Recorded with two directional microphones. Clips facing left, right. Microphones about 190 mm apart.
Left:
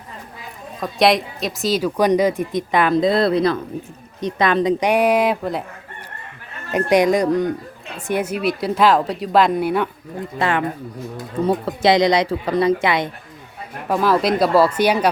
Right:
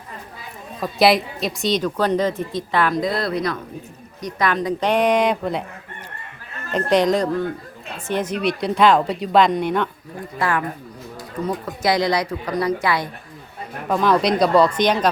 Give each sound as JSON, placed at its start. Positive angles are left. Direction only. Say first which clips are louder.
{"t": 0.8, "sound": "a woman's voice", "louder": "even", "side_deg": 0}
{"t": 6.7, "sound": "a woman's voice", "louder": "left 2 dB", "side_deg": 10}
{"t": 10.3, "sound": "speech", "louder": "left 2 dB", "side_deg": 25}
{"t": 13.8, "sound": "a woman's voice", "louder": "even", "side_deg": 5}